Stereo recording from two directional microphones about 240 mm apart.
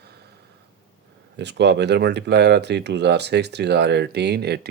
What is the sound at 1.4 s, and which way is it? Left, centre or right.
Speech, right.